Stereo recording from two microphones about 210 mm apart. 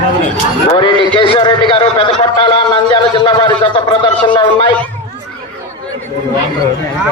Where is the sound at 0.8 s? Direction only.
20° left (ahead or behind).